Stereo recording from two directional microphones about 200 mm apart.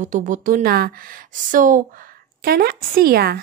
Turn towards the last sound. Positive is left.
turn(degrees=-50)  # may be behind; listen again after turning